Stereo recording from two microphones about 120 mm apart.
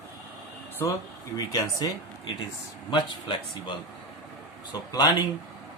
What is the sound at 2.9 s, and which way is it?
Speech, 40° left (ahead or behind).